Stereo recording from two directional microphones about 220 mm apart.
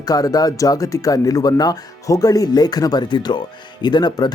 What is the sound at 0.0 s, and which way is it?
Speech, 15° left (ahead or behind).